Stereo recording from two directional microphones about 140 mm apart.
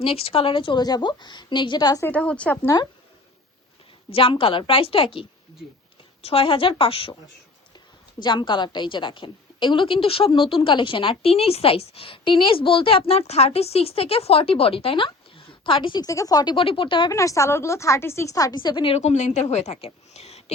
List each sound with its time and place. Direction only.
0.0 s a woman's voice: 45° left (ahead or behind); by 2.0 s 30° left (ahead or behind)
2.0 s a woman's voice: 10° left (ahead or behind)
4.1 s a woman's voice: 40° left (ahead or behind)
6.2 s a woman's voice: 40° left (ahead or behind)
8.2 s a woman's voice: 30° left (ahead or behind)
17.1 s a woman's voice: 20° left (ahead or behind)
18.9 s a woman's voice: 55° left (ahead or behind)